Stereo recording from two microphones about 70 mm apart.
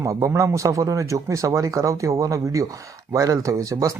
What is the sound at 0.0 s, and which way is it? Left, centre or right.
Speech, right.